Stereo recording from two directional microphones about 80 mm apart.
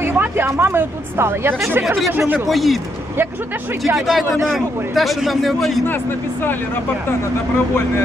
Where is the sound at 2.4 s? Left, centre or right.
Centre.